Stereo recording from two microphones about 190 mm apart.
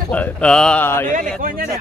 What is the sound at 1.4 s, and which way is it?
Speech, 45° right (ahead or behind).